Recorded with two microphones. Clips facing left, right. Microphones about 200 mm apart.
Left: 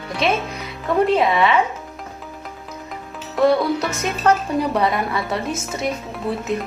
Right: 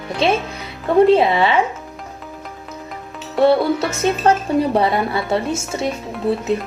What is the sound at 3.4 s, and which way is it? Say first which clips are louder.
Speech: right 2 dB; 30° right (ahead or behind).